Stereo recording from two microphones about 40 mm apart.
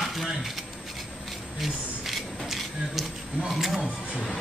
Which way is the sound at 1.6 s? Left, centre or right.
Centre.